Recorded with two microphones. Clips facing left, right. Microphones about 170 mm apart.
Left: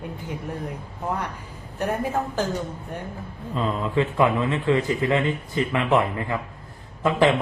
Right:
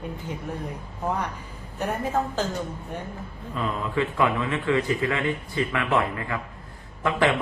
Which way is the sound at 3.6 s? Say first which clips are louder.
Left 3 dB; 25° left (ahead or behind).